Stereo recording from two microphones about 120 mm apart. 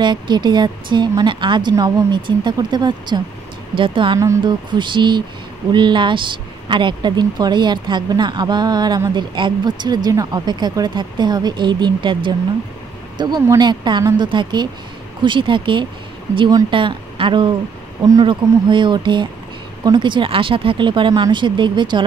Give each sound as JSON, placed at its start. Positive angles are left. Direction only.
{"t": 0.0, "sound": "speech", "side_deg": -40}
{"t": 16.3, "sound": "speech", "side_deg": -30}
{"t": 16.7, "sound": "a woman's voice", "side_deg": -45}